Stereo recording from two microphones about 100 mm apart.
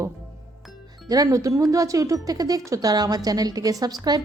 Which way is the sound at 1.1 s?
35° right (ahead or behind).